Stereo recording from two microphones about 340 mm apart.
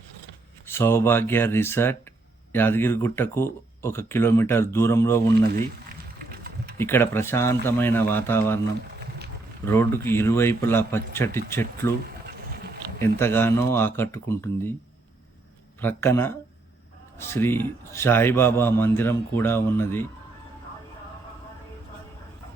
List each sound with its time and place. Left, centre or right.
0.7 s a man's voice: centre
6.7 s a man's voice: centre
9.6 s a man's voice: centre
12.0 s a sound: right
13.1 s a man's voice: centre
15.8 s a man's voice: centre